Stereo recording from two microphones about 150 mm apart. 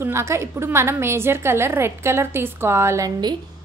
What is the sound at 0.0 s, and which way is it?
A woman's voice, 15° right (ahead or behind).